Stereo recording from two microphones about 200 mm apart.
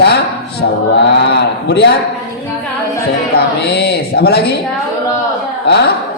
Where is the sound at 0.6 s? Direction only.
60° left (ahead or behind).